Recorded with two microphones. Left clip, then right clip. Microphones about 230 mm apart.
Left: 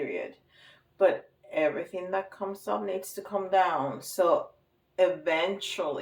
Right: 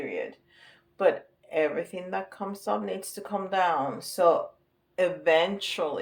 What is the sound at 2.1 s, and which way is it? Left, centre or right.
Speech, right.